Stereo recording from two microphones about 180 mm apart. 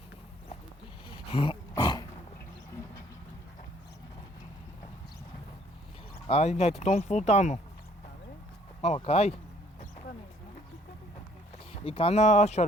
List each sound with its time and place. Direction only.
1.1 s dog: 30° left (ahead or behind)
6.2 s speech: 35° left (ahead or behind)
8.8 s speech: 35° left (ahead or behind)
11.5 s speech: 35° left (ahead or behind)